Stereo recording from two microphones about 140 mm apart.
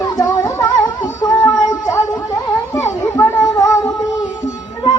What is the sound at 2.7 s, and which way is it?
Children playing, 20° left (ahead or behind).